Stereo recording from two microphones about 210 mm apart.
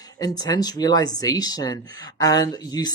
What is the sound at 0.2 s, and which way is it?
Speech, 20° left (ahead or behind).